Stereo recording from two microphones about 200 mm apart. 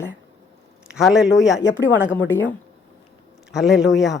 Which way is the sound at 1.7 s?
70° left (ahead or behind).